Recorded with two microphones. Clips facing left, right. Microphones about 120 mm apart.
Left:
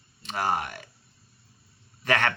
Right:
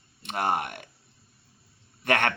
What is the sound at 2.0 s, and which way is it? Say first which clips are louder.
Speech: even; 60° right (ahead or behind).